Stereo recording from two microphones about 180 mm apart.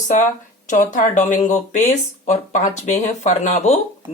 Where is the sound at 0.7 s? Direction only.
45° left (ahead or behind).